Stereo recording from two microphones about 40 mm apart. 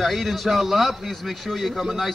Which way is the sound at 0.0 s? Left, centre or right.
Centre.